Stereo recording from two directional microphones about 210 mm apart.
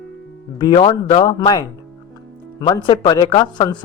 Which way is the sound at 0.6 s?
20° left (ahead or behind).